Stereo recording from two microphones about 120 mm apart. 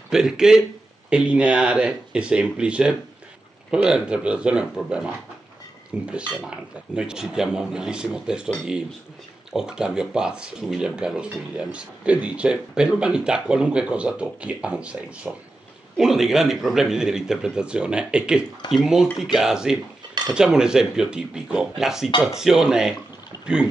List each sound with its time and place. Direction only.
0.1 s speech: 5° right (ahead or behind)
9.5 s speech: 5° right (ahead or behind)